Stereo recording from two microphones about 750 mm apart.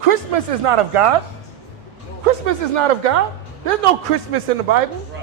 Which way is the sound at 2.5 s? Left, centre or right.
Right.